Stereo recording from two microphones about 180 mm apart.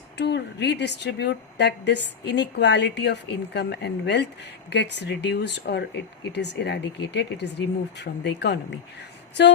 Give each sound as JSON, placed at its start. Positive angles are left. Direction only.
{"t": 0.2, "sound": "a woman's voice", "side_deg": 70}